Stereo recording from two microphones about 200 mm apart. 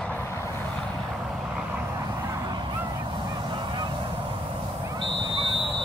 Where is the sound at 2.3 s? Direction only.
20° right (ahead or behind).